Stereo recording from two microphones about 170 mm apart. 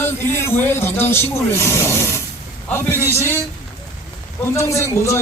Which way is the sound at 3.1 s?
15° left (ahead or behind).